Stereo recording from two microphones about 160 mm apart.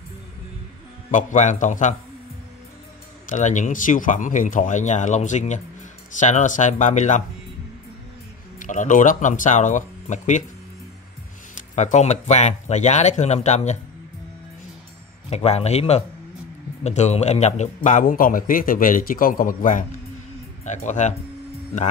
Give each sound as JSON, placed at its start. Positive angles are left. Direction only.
{"t": 1.1, "sound": "speech", "side_deg": 50}
{"t": 3.3, "sound": "speech", "side_deg": 50}
{"t": 8.5, "sound": "speech", "side_deg": 55}
{"t": 11.5, "sound": "speech", "side_deg": 50}
{"t": 15.2, "sound": "speech", "side_deg": 40}
{"t": 17.8, "sound": "a man's voice", "side_deg": 55}